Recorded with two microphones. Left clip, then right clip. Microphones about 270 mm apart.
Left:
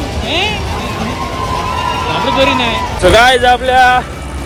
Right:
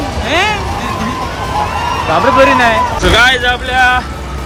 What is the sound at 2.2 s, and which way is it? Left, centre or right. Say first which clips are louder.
Speech: right 5 dB; centre.